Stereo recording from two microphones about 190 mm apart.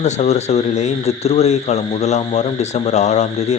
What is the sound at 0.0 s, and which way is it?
Speech, 35° left (ahead or behind).